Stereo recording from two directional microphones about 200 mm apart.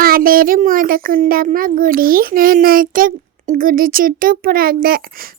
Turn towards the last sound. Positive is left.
turn(degrees=-45)  # may be behind; listen again after turning